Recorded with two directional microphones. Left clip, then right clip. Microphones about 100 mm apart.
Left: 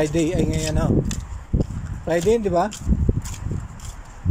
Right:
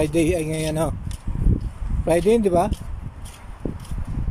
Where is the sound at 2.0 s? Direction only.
25° right (ahead or behind).